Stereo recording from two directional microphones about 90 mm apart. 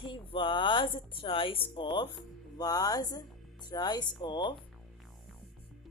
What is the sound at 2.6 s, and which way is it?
Speech, 45° left (ahead or behind).